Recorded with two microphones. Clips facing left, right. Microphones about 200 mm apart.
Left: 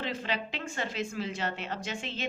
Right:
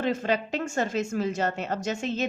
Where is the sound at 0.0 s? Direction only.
45° right (ahead or behind).